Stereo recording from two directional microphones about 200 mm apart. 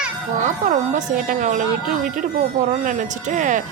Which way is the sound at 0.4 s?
40° right (ahead or behind).